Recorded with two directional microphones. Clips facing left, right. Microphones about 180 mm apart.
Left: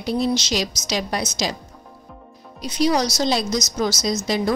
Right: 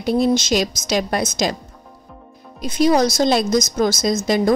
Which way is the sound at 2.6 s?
50° right (ahead or behind).